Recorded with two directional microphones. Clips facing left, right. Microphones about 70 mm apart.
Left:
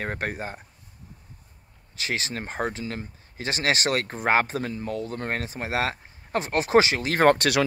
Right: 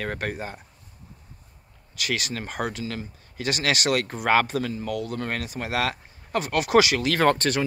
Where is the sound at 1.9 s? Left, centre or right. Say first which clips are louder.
Right 1 dB; left.